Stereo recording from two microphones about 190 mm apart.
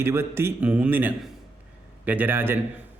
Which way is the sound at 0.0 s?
15° right (ahead or behind).